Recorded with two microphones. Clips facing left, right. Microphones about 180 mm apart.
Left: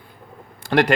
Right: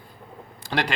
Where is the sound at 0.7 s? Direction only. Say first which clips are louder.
Left 9 dB; 50° left (ahead or behind).